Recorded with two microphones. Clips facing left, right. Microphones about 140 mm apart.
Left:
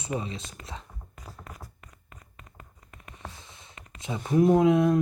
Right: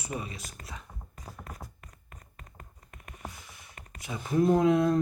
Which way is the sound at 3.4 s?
25° left (ahead or behind).